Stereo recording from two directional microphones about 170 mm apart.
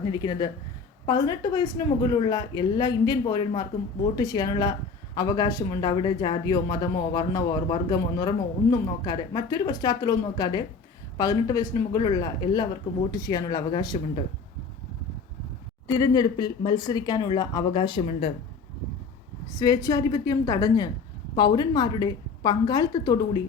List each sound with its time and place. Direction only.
0.1 s speech: 25° left (ahead or behind)
15.9 s speech: 20° left (ahead or behind)
19.5 s speech: 25° left (ahead or behind)